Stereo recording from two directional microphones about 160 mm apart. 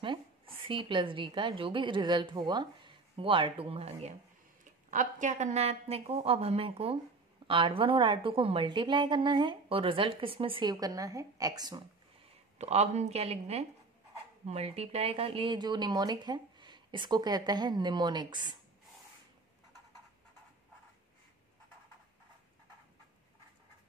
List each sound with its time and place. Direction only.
0.0 s a woman's voice: 30° right (ahead or behind)
4.9 s a woman's voice: 50° right (ahead or behind); by 11.8 s 25° right (ahead or behind)
12.5 s a woman's voice: 45° right (ahead or behind); by 18.6 s 25° right (ahead or behind)